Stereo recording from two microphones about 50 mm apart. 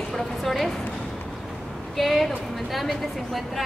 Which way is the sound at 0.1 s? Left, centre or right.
Centre.